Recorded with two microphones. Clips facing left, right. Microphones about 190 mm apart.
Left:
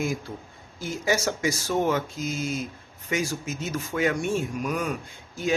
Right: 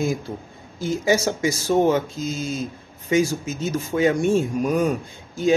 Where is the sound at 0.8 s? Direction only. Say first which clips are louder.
Right 6 dB; 25° right (ahead or behind).